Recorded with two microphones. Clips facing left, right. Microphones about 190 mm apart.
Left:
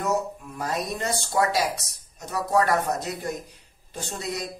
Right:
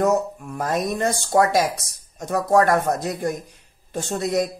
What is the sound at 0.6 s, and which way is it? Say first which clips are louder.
Speech: right 6 dB; 50° right (ahead or behind).